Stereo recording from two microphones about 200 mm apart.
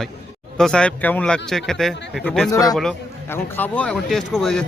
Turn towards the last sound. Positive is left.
turn(degrees=0)  # may be behind; listen again after turning